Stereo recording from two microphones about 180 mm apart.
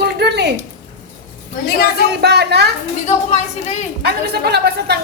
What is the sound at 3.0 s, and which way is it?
Speech, 40° left (ahead or behind).